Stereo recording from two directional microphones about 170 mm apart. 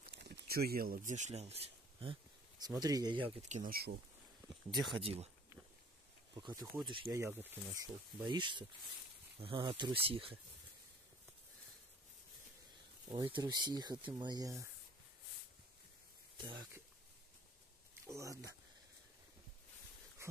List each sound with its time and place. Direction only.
0.1 s speech: 85° right; by 2.1 s 35° right (ahead or behind)
2.6 s speech: 20° right (ahead or behind)
3.4 s speech: 45° right (ahead or behind)
4.7 s speech: centre (ahead or behind)
5.0 s speech: 35° right (ahead or behind)
6.3 s speech: 20° right (ahead or behind)
7.2 s speech: 15° right (ahead or behind); by 10.3 s 35° right (ahead or behind)
13.1 s speech: 30° right (ahead or behind)
16.3 s speech: 25° right (ahead or behind)
18.0 s speech: 20° right (ahead or behind)